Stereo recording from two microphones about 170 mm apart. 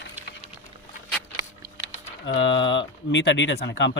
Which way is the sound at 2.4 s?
90° left.